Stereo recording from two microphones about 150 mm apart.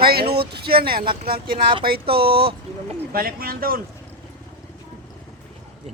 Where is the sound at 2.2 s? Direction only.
40° right (ahead or behind).